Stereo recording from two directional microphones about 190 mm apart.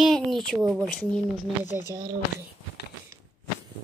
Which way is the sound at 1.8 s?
20° right (ahead or behind).